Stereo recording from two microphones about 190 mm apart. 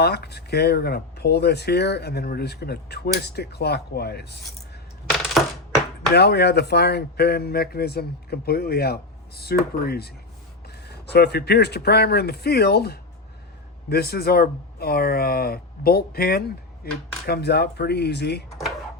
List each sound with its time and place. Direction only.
0.0 s speech: 60° left (ahead or behind)
6.1 s speech: 60° left (ahead or behind)